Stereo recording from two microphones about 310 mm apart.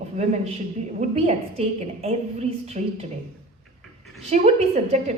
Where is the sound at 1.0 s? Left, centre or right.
Centre.